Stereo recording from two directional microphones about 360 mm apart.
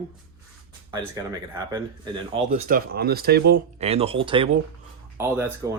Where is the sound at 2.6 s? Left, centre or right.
Right.